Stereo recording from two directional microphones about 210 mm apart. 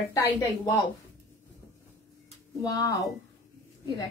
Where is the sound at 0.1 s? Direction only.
10° left (ahead or behind).